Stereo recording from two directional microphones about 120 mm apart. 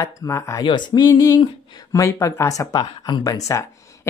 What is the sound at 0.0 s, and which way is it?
Speech, 25° left (ahead or behind).